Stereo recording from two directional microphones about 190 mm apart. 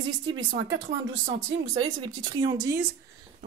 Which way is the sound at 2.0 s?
20° right (ahead or behind).